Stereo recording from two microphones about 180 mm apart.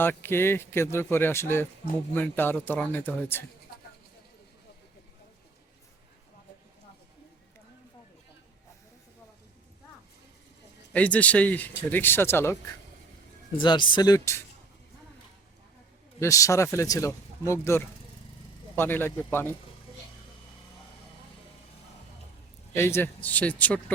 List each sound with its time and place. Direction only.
0.0 s a man's voice: 10° left (ahead or behind)
10.9 s a man's voice: 10° left (ahead or behind)
13.6 s speech: 25° left (ahead or behind)
16.2 s a man's voice: 15° left (ahead or behind)
22.7 s a man's voice: 15° left (ahead or behind)